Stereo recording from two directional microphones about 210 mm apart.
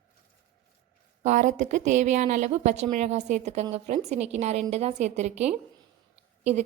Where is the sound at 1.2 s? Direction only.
35° right (ahead or behind).